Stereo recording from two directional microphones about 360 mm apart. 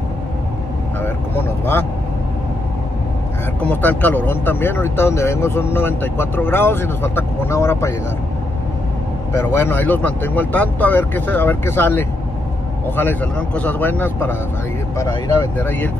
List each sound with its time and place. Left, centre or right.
1.0 s vehicle: centre
3.6 s speech: centre
9.3 s speech: centre